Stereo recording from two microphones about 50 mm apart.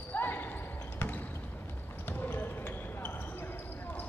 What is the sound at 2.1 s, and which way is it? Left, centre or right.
Basketball bounce, left.